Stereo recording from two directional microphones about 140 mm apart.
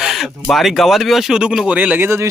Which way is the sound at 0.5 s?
Centre (ahead or behind).